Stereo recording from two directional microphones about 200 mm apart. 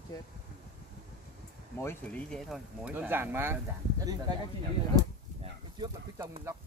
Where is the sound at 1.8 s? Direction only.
10° left (ahead or behind).